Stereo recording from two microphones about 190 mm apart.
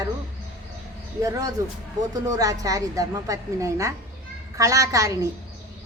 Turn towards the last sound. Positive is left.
turn(degrees=-15)  # may be behind; listen again after turning